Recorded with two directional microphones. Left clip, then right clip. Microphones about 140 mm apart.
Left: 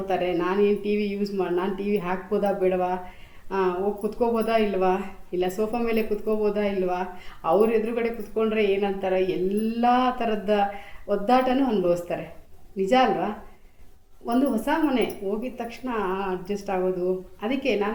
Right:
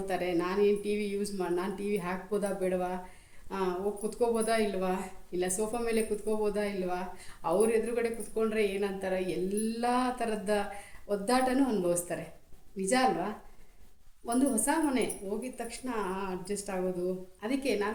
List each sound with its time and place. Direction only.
0.1 s a woman's voice: 20° right (ahead or behind)
4.0 s a woman's voice: 20° right (ahead or behind)